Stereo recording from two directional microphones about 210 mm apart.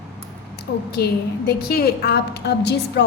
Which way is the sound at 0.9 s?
50° left (ahead or behind).